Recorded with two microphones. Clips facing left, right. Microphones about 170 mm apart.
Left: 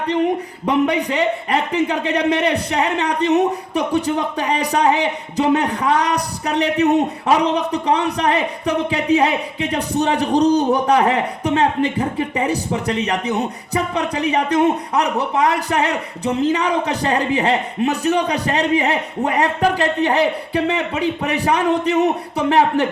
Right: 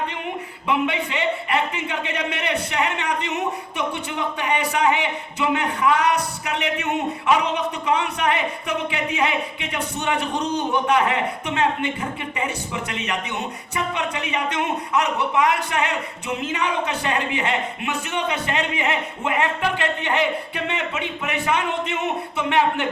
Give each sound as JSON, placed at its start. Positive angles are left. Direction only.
{"t": 0.6, "sound": "a man's voice", "side_deg": 40}